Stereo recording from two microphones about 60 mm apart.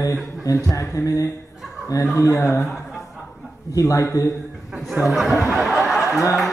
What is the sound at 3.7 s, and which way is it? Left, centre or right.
Speech, left.